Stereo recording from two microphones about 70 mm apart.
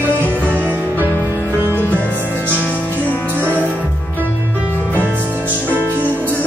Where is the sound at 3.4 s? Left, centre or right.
Right.